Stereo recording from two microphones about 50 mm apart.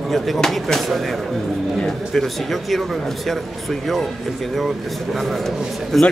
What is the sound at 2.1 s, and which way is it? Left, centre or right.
Speech, centre.